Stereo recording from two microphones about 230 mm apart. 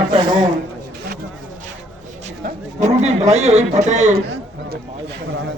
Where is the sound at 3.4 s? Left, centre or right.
Right.